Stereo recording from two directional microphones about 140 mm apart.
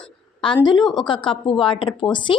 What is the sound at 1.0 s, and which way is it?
Speech, 35° left (ahead or behind).